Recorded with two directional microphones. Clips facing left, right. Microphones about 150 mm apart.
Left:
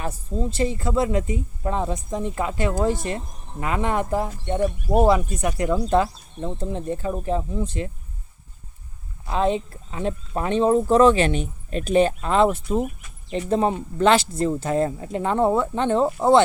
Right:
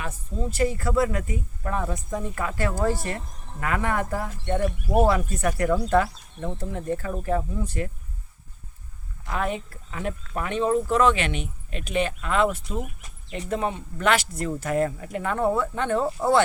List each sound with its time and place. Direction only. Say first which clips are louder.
0.0 s speech: left 4 dB; 35° left (ahead or behind)
0.6 s speech: even; 25° left (ahead or behind)
9.2 s speech: left 6 dB; 25° left (ahead or behind)